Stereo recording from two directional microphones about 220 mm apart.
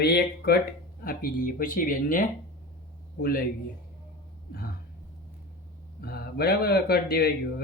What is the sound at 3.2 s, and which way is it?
Speech, 45° left (ahead or behind).